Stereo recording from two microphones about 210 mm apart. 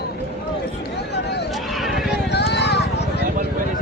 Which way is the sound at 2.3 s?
55° left (ahead or behind).